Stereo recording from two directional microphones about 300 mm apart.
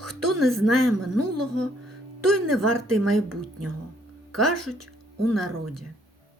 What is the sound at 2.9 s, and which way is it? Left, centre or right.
Speech, right.